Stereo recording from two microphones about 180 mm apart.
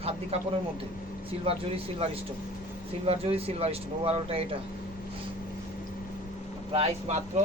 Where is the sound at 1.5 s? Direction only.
30° right (ahead or behind).